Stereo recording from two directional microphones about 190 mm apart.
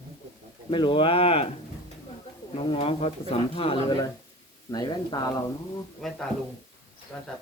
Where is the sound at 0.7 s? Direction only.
25° left (ahead or behind).